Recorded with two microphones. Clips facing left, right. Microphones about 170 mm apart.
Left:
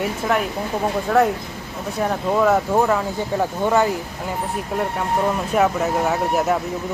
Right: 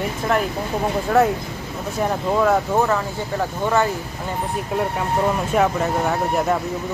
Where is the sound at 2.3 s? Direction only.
Centre (ahead or behind).